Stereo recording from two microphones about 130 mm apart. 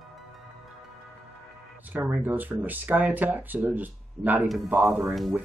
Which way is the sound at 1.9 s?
15° right (ahead or behind).